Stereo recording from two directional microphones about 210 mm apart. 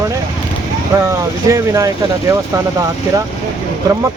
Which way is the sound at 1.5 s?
15° right (ahead or behind).